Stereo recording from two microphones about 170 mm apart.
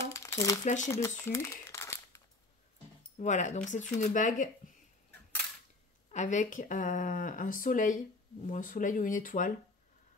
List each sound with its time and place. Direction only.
0.1 s a sound: 15° left (ahead or behind)
0.8 s crumpling: 15° left (ahead or behind)
3.2 s speech: 45° left (ahead or behind)
6.0 s speech: 45° left (ahead or behind)